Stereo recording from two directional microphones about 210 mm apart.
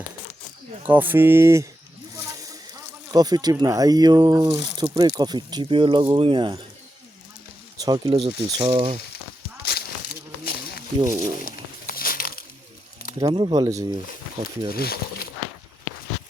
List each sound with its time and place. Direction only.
0.9 s speech: 10° right (ahead or behind)
2.1 s a sound: 15° right (ahead or behind)
4.7 s speech: 20° right (ahead or behind)
7.8 s speech: 20° right (ahead or behind)
9.6 s a sound: 50° left (ahead or behind)
11.2 s crumpling: 40° left (ahead or behind)
13.1 s speech: 20° right (ahead or behind)
14.7 s speech: 45° left (ahead or behind)